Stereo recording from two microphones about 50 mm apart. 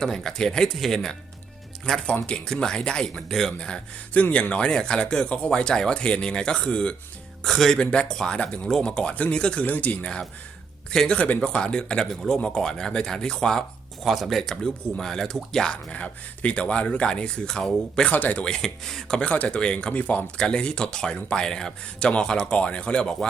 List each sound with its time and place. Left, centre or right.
0.2 s speech: centre
4.1 s speech: left
7.4 s speech: centre
7.8 s speech: left
8.0 s speech: centre
9.6 s speech: left
10.9 s speech: centre
15.9 s speech: left
18.1 s speech: left
18.4 s speech: centre
19.3 s speech: left